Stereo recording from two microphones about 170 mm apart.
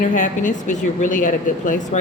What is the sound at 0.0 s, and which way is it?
Speech, 50° left (ahead or behind).